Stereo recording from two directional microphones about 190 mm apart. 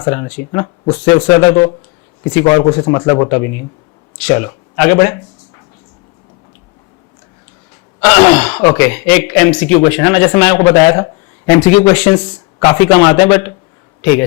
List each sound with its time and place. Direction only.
0.0 s speech: 20° left (ahead or behind)
8.0 s speech: 10° left (ahead or behind)